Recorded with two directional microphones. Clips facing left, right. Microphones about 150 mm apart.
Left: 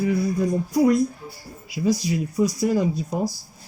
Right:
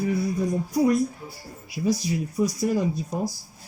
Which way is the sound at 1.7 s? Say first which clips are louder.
Left 2 dB; 90° left.